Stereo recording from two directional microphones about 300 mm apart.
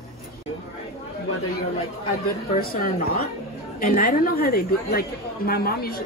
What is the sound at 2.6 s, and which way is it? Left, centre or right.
Speech, left.